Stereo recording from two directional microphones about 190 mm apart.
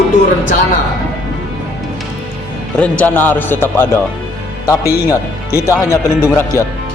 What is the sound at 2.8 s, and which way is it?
A man's voice, 10° left (ahead or behind).